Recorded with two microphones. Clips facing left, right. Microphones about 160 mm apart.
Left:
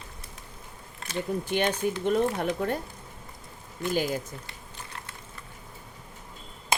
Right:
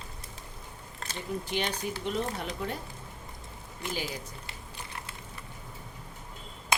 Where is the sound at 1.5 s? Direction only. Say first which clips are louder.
Left 7 dB; 50° left (ahead or behind).